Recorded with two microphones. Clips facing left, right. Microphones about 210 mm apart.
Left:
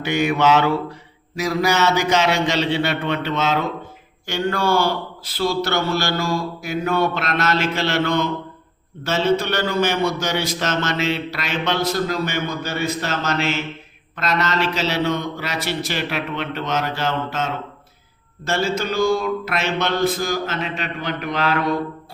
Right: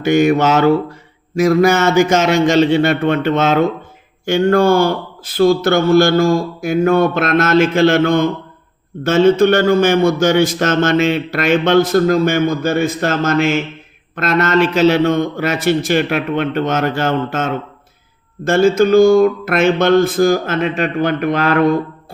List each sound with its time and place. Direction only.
0.0 s a man's voice: 45° right (ahead or behind)